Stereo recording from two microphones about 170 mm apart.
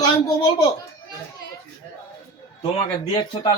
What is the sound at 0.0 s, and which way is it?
Speech, 25° left (ahead or behind).